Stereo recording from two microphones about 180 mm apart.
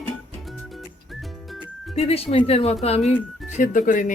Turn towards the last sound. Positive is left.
turn(degrees=45)  # may be behind; listen again after turning